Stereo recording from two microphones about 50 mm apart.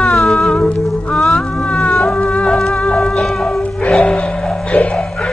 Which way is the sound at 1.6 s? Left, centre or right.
Left.